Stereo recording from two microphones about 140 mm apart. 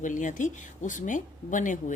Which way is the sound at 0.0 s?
65° left (ahead or behind).